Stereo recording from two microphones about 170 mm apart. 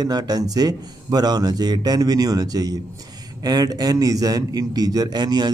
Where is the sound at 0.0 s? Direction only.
25° right (ahead or behind).